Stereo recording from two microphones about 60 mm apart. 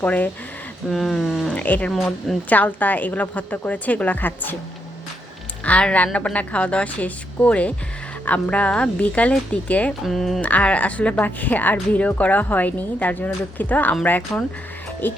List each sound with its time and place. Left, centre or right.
0.0 s a woman's voice: left
0.9 s speech: centre
1.5 s a woman's voice: left
1.9 s speech: centre
2.5 s a woman's voice: left
5.6 s a woman's voice: left
10.0 s speech: centre
10.4 s a woman's voice: left